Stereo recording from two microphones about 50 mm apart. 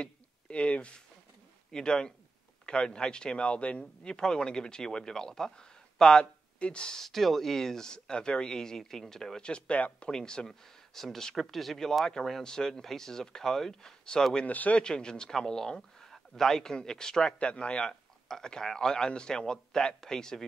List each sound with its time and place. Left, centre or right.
0.0 s a sound: left
1.7 s speech: centre
7.0 s speech: centre; by 9.9 s left
9.9 s speech: centre
14.4 s speech: left
14.8 s speech: centre